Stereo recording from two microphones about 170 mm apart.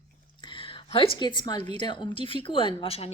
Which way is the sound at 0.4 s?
30° left (ahead or behind).